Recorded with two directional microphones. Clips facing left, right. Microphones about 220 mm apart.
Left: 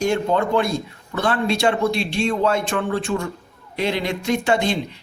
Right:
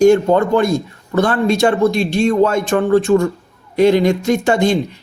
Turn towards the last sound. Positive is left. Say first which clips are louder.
# right 6 dB
turn(degrees=-45)  # may be behind; listen again after turning